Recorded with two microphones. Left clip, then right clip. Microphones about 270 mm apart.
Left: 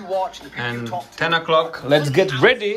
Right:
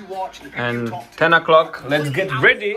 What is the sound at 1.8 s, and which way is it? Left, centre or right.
Speech, centre.